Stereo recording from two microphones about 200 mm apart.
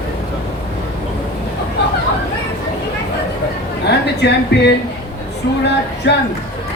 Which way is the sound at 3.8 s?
55° left (ahead or behind).